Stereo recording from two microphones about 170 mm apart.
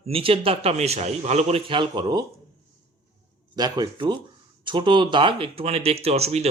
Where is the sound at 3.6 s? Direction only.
25° right (ahead or behind).